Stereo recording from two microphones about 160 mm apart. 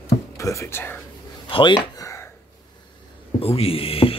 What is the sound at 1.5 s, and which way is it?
Speech, 30° left (ahead or behind).